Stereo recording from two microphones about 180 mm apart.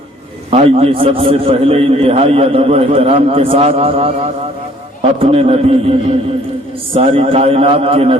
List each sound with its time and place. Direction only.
0.5 s a man's voice: 35° right (ahead or behind)
5.2 s a man's voice: 30° right (ahead or behind)